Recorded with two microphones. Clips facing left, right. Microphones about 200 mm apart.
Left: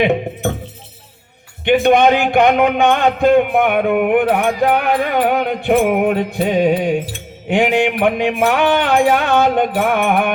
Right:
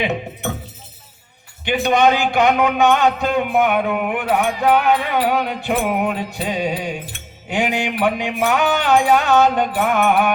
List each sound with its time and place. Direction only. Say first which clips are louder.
0.0 s a man's voice: left 7 dB; 55° left (ahead or behind)
1.6 s a man's voice: left 5 dB; 55° left (ahead or behind)